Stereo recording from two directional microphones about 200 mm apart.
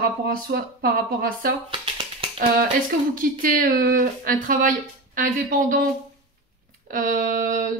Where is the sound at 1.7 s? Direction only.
25° right (ahead or behind).